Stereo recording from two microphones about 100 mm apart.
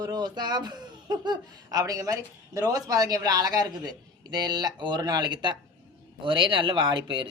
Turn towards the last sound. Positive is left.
turn(degrees=-55)  # may be behind; listen again after turning